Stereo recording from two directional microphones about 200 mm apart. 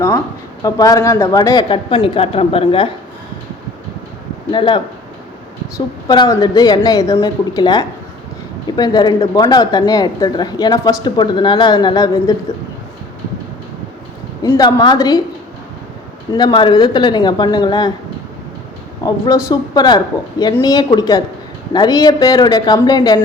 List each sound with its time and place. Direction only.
0.6 s a woman's voice: 15° left (ahead or behind)
4.5 s a woman's voice: 25° left (ahead or behind)
14.4 s a woman's voice: 20° left (ahead or behind)
16.3 s a woman's voice: 20° left (ahead or behind)
19.3 s a woman's voice: 20° left (ahead or behind)